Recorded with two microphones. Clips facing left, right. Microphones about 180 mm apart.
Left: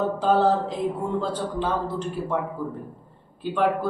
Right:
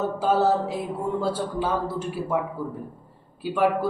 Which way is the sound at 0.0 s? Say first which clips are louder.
Left 1 dB; 5° right (ahead or behind).